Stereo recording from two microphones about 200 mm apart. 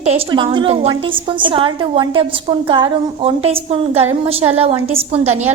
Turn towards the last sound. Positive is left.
turn(degrees=-35)  # may be behind; listen again after turning